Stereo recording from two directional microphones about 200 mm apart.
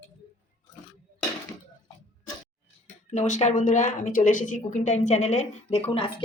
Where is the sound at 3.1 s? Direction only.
35° left (ahead or behind).